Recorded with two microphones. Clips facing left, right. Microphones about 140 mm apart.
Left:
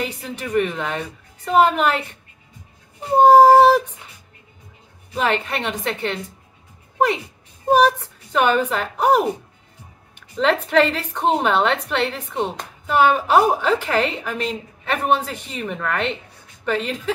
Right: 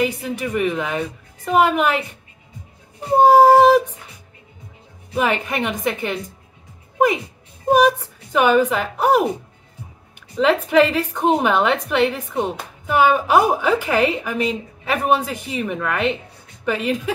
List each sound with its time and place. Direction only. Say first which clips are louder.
0.0 s a woman's voice: right 6 dB; 10° right (ahead or behind)
3.2 s a woman's voice: left 1 dB; 10° right (ahead or behind)
5.1 s a woman's voice: right 1 dB; 10° right (ahead or behind)
7.7 s a woman's voice: right 1 dB; 10° right (ahead or behind)
10.4 s a woman's voice: right 2 dB; 5° right (ahead or behind)